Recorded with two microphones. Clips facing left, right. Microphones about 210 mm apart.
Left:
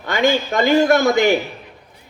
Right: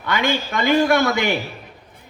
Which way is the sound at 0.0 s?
45° left (ahead or behind).